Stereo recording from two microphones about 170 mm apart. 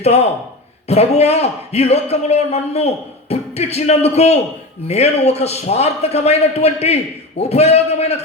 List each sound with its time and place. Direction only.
0.0 s a man's voice: 40° left (ahead or behind)